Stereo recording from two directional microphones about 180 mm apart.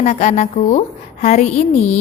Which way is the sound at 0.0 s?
40° left (ahead or behind).